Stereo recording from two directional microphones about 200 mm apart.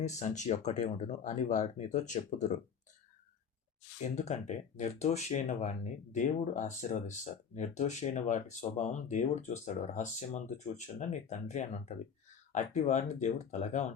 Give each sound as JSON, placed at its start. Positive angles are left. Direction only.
{"t": 0.2, "sound": "speech", "side_deg": 35}
{"t": 4.1, "sound": "speech", "side_deg": 35}